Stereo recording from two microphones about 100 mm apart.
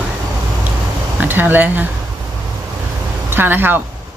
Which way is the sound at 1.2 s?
20° right (ahead or behind).